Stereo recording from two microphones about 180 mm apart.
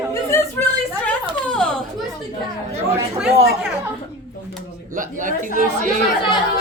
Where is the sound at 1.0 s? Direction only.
5° left (ahead or behind).